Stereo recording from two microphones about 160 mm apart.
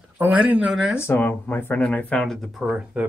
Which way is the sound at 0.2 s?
10° right (ahead or behind).